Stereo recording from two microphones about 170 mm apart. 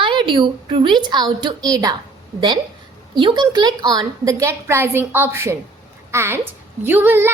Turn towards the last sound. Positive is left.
turn(degrees=-10)  # may be behind; listen again after turning